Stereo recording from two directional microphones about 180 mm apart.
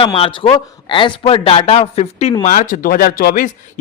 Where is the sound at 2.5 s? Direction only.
50° left (ahead or behind).